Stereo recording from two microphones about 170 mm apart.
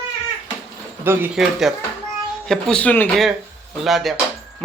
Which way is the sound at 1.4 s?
Centre (ahead or behind).